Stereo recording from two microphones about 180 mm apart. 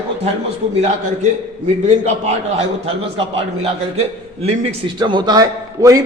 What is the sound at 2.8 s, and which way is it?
A man's voice, 35° right (ahead or behind).